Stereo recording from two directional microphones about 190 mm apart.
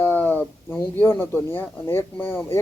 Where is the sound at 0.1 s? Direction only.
10° left (ahead or behind).